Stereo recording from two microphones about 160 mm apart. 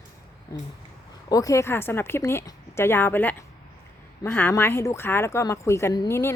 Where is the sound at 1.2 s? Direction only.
20° left (ahead or behind).